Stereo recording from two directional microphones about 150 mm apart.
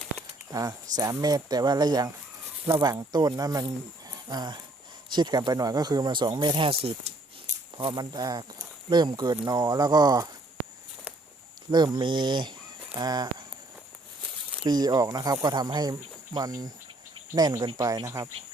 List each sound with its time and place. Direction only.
0.5 s speech: 25° right (ahead or behind)
11.7 s speech: 30° right (ahead or behind)
14.6 s speech: 25° right (ahead or behind)